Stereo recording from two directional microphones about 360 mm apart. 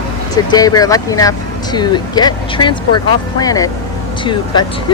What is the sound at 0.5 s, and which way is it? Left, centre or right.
Speech, centre.